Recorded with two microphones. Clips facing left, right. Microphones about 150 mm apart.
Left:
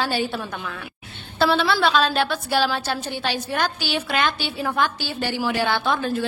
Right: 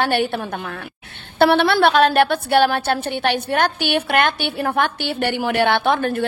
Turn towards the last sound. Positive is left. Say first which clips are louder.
# right 4 dB
turn(degrees=-60)  # may be behind; listen again after turning